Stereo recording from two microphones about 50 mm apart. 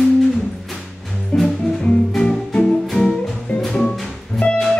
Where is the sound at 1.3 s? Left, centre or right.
Left.